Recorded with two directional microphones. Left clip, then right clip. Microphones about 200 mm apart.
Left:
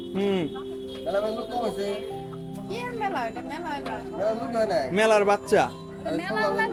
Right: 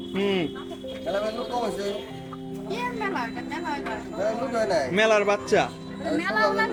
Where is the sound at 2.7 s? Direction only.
55° left (ahead or behind).